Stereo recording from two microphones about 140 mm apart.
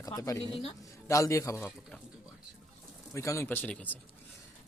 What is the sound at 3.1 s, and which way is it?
Speech, 20° left (ahead or behind).